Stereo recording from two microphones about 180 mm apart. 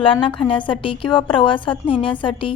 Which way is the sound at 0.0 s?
30° left (ahead or behind).